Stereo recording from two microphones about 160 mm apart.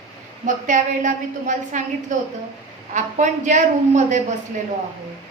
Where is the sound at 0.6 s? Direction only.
50° right (ahead or behind).